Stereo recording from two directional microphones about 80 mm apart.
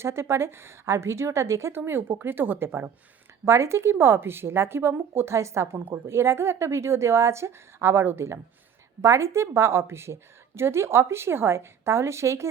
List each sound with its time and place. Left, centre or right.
0.0 s speech: right